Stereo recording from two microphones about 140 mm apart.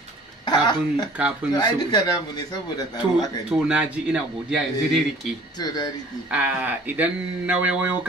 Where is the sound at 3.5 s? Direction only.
10° right (ahead or behind).